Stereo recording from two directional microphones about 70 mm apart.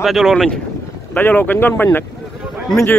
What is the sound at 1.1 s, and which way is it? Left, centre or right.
Speech, left.